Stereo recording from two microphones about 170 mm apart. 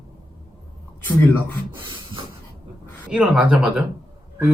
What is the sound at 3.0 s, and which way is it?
Speech, 5° right (ahead or behind).